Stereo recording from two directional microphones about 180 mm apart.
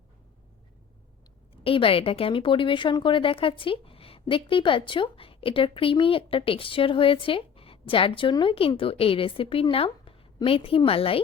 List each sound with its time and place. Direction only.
1.6 s a woman's voice: 30° left (ahead or behind)